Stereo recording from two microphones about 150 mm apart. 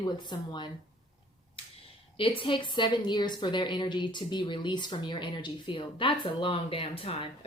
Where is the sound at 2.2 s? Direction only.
35° left (ahead or behind).